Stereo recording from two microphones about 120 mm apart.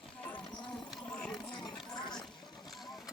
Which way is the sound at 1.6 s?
35° left (ahead or behind).